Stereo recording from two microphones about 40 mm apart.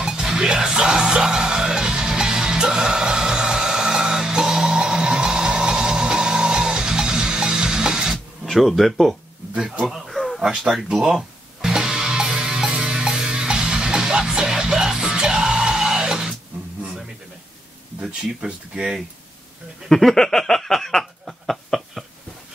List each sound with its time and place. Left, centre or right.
0.0 s music: centre
8.5 s speech: centre
10.0 s a sound: centre
10.4 s speech: centre
11.6 s music: centre
18.4 s speech: right
19.9 s a sound: centre